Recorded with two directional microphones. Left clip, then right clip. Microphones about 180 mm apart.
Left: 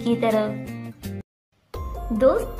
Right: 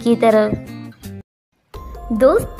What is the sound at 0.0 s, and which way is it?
Speech, 35° right (ahead or behind).